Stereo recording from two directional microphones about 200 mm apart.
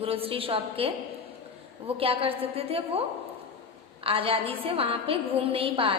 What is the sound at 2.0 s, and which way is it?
A woman's voice, 30° right (ahead or behind).